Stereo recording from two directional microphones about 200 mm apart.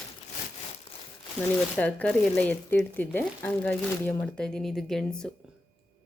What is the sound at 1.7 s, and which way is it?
Speech, 5° left (ahead or behind).